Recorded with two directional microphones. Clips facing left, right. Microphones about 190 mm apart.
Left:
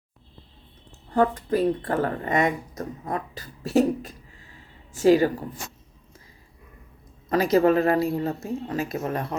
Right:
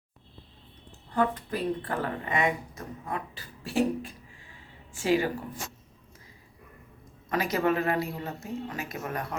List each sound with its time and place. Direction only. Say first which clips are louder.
0.9 s speech: left 5 dB; 45° left (ahead or behind)
7.3 s speech: left 7 dB; 35° left (ahead or behind)